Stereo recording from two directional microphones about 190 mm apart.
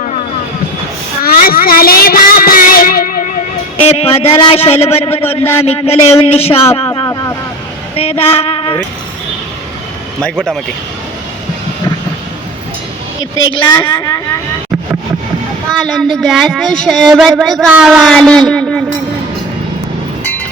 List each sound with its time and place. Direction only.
1.2 s child singing: 50° left (ahead or behind)
3.8 s a man's voice: 30° left (ahead or behind)
6.9 s vehicle: 20° left (ahead or behind)
7.9 s speech: 30° left (ahead or behind)
10.2 s speech: 5° left (ahead or behind)
13.5 s a woman's voice: 25° left (ahead or behind)
15.7 s speech: centre (ahead or behind)